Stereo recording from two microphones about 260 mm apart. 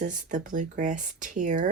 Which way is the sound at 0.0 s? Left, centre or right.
Right.